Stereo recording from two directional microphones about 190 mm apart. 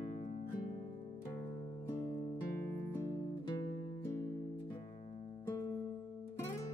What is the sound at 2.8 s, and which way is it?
Music, 10° left (ahead or behind).